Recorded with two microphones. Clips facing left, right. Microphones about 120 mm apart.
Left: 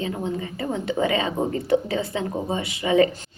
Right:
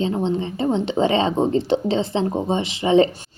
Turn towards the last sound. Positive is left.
turn(degrees=-25)  # may be behind; listen again after turning